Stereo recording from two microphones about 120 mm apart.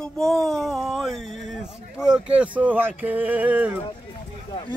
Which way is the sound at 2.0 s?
5° right (ahead or behind).